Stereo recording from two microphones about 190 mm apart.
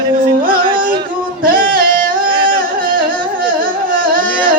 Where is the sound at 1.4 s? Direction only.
50° right (ahead or behind).